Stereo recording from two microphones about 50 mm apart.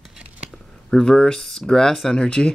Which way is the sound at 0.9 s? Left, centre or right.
Centre.